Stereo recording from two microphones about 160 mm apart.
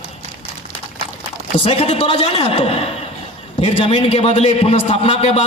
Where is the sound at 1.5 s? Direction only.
40° left (ahead or behind).